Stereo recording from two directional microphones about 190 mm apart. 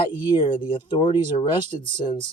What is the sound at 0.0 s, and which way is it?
Speech, 25° left (ahead or behind).